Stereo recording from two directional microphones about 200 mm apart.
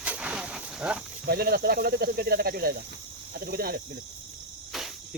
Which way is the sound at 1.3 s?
50° right (ahead or behind).